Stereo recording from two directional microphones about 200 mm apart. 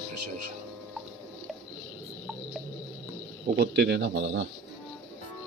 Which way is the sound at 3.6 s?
55° right (ahead or behind).